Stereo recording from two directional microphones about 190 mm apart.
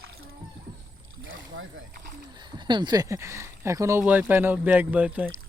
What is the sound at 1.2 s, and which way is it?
Rowboat, 90° right.